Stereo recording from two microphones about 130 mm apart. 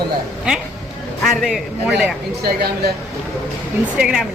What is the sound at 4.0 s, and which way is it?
Speech, 5° right (ahead or behind).